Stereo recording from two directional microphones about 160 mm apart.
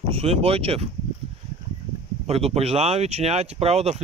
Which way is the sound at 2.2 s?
40° right (ahead or behind).